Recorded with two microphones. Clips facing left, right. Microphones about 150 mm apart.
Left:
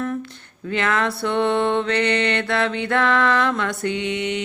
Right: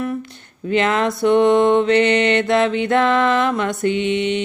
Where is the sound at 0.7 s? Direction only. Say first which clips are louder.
Right 4 dB; 20° right (ahead or behind).